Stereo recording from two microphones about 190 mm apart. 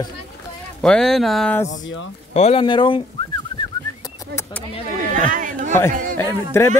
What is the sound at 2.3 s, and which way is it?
Speech, 30° left (ahead or behind).